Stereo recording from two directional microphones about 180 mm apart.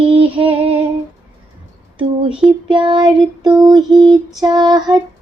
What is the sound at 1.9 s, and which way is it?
Speech, 30° right (ahead or behind).